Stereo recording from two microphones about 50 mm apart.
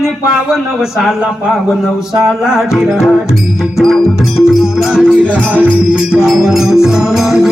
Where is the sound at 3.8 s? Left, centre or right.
Centre.